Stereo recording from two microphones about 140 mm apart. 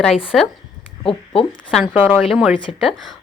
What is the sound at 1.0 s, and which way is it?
Speech, 40° left (ahead or behind).